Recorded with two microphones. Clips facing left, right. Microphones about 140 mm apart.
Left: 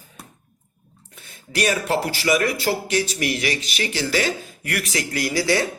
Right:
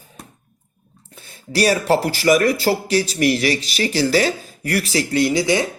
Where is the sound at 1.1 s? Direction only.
35° right (ahead or behind).